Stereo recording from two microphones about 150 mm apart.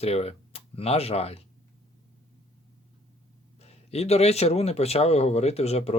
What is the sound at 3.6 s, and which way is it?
Speech, 45° left (ahead or behind).